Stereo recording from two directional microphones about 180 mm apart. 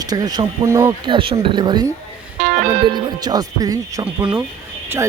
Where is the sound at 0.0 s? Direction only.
20° right (ahead or behind).